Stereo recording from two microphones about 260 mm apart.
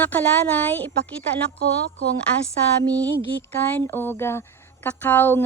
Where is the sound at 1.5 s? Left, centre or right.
Right.